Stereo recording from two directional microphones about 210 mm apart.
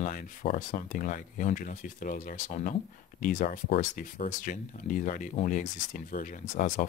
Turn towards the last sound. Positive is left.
turn(degrees=35)  # may be behind; listen again after turning